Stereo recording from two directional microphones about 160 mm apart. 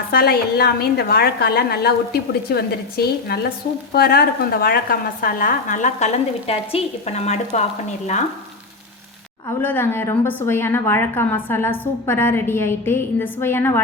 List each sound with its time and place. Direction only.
0.1 s a woman's voice: 75° left (ahead or behind); by 7.6 s 45° left (ahead or behind)
9.6 s a woman's voice: 15° left (ahead or behind)